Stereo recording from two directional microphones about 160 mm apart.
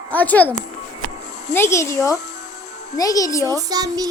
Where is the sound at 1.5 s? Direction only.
15° left (ahead or behind).